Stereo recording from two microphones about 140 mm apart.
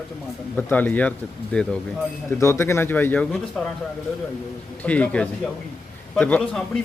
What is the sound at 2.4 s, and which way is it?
Speech, 20° left (ahead or behind).